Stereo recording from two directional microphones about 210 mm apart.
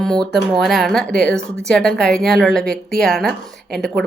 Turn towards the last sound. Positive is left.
turn(degrees=0)  # may be behind; listen again after turning